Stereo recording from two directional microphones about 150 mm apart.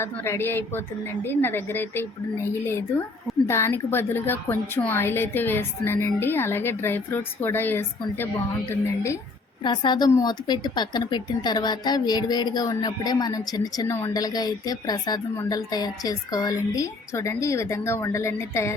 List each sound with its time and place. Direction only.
0.0 s a woman's voice: 15° left (ahead or behind)
9.6 s a woman's voice: 30° left (ahead or behind)